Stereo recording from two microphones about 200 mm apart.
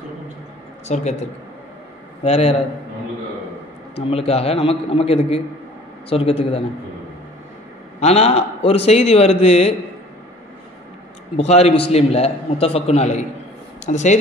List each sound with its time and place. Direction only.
0.8 s a man's voice: 35° left (ahead or behind)
2.2 s a man's voice: 30° left (ahead or behind)
4.1 s a man's voice: 30° left (ahead or behind)
8.0 s a man's voice: 30° left (ahead or behind)
11.3 s a man's voice: 30° left (ahead or behind)